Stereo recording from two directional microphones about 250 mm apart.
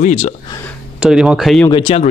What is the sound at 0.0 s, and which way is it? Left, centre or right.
Speech, left.